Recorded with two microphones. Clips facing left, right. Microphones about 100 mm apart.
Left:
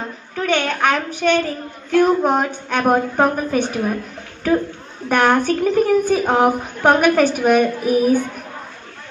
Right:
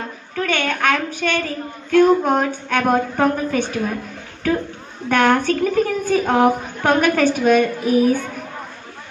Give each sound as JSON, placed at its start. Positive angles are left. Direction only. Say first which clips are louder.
{"t": 0.4, "sound": "a woman's voice", "louder": "left 2 dB", "side_deg": 15}
{"t": 5.1, "sound": "a woman's voice", "louder": "even", "side_deg": 15}